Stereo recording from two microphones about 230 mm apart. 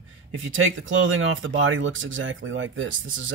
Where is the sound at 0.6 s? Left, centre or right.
Right.